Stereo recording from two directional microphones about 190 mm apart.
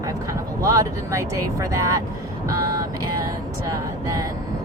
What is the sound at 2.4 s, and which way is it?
Vehicle, 20° right (ahead or behind).